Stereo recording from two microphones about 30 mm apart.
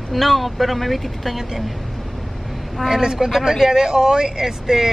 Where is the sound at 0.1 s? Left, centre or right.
Centre.